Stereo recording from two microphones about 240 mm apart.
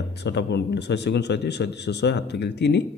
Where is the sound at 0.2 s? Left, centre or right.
Left.